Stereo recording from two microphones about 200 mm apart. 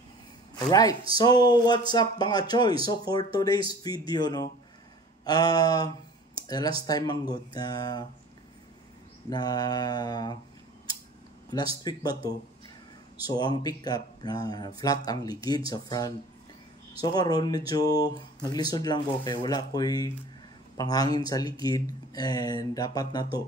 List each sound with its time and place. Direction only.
0.6 s speech: 20° left (ahead or behind)
6.3 s a sound: 20° left (ahead or behind)
6.9 s speech: 20° left (ahead or behind)
9.3 s speech: 20° left (ahead or behind)
11.5 s speech: 20° left (ahead or behind)